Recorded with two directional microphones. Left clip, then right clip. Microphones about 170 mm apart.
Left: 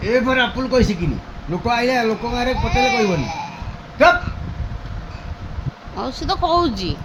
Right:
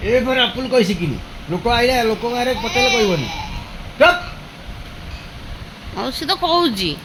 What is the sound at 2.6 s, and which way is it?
Speech, 15° left (ahead or behind).